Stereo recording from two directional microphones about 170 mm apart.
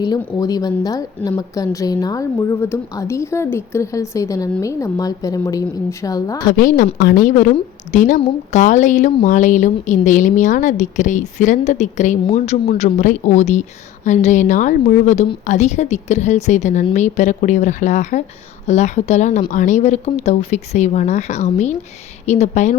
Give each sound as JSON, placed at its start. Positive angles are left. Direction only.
{"t": 0.0, "sound": "a woman's voice", "side_deg": 25}
{"t": 6.5, "sound": "a woman's voice", "side_deg": 55}